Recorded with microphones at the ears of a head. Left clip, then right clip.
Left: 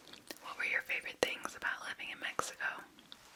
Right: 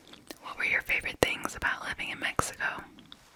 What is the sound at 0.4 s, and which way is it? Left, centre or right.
Speech, right.